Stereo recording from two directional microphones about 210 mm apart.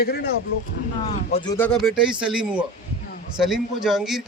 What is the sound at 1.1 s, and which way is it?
Speech, 30° left (ahead or behind).